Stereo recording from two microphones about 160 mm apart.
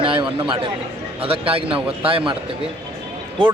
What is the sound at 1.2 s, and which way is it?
A man's voice, 35° right (ahead or behind).